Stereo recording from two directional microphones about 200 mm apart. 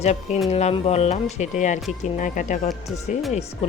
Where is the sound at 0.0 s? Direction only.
35° left (ahead or behind).